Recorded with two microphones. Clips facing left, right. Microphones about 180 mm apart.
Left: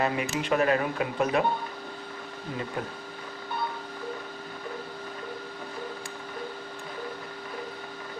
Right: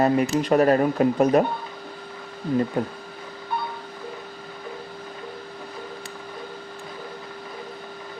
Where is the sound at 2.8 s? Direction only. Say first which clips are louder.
Right 8 dB; 40° right (ahead or behind).